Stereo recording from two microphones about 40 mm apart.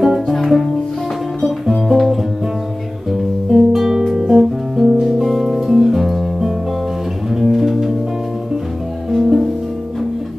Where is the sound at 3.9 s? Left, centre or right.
Centre.